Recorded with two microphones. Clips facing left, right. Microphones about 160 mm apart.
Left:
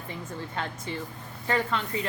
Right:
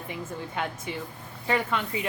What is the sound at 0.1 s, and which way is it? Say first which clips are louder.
A woman's voice: right 1 dB; 10° right (ahead or behind).